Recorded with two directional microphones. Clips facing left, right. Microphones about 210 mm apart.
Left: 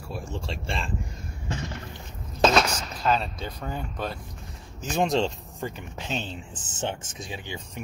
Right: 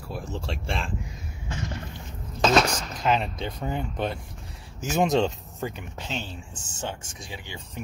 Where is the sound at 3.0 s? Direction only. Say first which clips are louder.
Right 1 dB; 15° right (ahead or behind).